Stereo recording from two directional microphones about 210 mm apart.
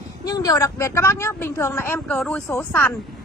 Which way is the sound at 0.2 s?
15° left (ahead or behind).